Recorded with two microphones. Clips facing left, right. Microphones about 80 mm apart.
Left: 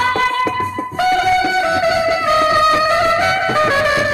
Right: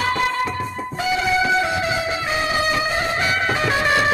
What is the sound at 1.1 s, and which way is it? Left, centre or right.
Music, left.